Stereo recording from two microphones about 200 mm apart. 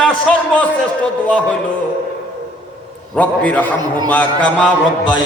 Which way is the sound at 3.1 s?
5° left (ahead or behind).